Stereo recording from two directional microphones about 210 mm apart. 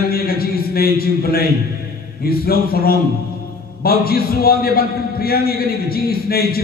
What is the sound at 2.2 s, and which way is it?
A man's voice, 45° left (ahead or behind).